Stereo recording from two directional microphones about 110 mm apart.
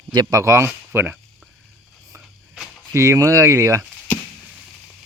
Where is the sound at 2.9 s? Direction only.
25° right (ahead or behind).